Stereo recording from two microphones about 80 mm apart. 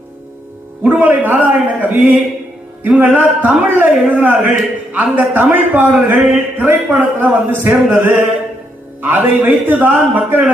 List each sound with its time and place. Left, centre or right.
0.9 s a man's voice: right